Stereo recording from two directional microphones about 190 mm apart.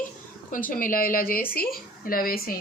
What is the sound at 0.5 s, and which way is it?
A woman's voice, 45° left (ahead or behind).